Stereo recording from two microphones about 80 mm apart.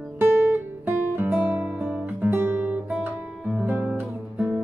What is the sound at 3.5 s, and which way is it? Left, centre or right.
Music, centre.